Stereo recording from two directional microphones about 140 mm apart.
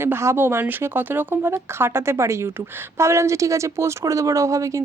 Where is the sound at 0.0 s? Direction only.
20° right (ahead or behind).